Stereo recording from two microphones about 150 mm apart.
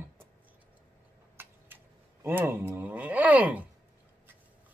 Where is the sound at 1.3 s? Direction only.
15° right (ahead or behind).